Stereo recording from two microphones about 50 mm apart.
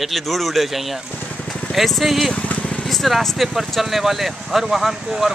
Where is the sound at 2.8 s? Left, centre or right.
Centre.